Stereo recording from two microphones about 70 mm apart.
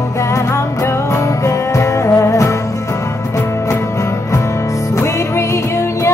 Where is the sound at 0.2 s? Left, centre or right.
Left.